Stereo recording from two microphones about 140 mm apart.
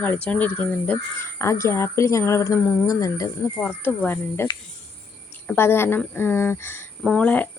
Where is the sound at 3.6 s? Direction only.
10° left (ahead or behind).